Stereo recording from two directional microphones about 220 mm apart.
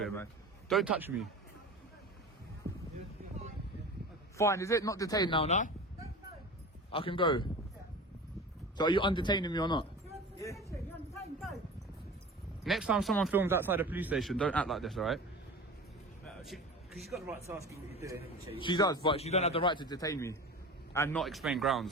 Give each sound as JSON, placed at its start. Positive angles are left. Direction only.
{"t": 0.0, "sound": "speech", "side_deg": 10}
{"t": 0.7, "sound": "speech", "side_deg": 0}
{"t": 4.4, "sound": "speech", "side_deg": 15}
{"t": 6.9, "sound": "a man's voice", "side_deg": 25}
{"t": 8.8, "sound": "a man's voice", "side_deg": 20}
{"t": 10.3, "sound": "a sound", "side_deg": 15}
{"t": 12.6, "sound": "speech", "side_deg": 0}
{"t": 16.2, "sound": "a sound", "side_deg": 0}
{"t": 17.2, "sound": "speech", "side_deg": -15}
{"t": 18.4, "sound": "a man's voice", "side_deg": 25}
{"t": 21.2, "sound": "speech", "side_deg": 0}